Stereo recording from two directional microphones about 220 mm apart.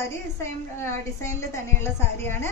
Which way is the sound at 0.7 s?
10° left (ahead or behind).